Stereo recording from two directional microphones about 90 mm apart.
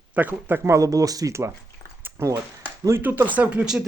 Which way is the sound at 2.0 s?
25° right (ahead or behind).